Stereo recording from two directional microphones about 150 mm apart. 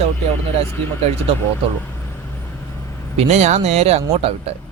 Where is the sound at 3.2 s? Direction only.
50° right (ahead or behind).